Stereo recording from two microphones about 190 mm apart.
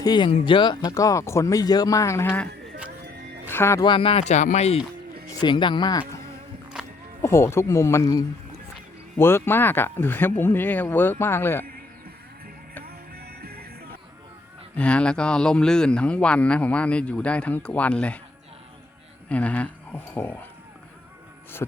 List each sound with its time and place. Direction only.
0.0 s a man's voice: 20° left (ahead or behind)
3.5 s speech: 15° left (ahead or behind); by 4.8 s 35° left (ahead or behind)
5.4 s a man's voice: 25° left (ahead or behind)
12.8 s music: 55° right (ahead or behind)
14.8 s a man's voice: 5° left (ahead or behind)
19.3 s speech: 5° left (ahead or behind)
21.6 s a man's voice: 15° left (ahead or behind)